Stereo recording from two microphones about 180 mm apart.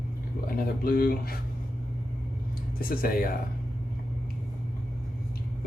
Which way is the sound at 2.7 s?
55° left (ahead or behind).